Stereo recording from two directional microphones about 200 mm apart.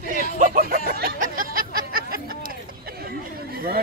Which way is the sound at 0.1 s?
40° right (ahead or behind).